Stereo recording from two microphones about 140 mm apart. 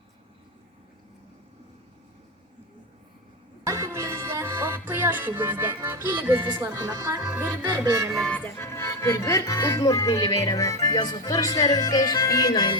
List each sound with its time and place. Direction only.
3.6 s music: 20° right (ahead or behind)
6.4 s speech: 30° right (ahead or behind)
8.1 s speech: 5° left (ahead or behind); by 12.7 s 30° left (ahead or behind)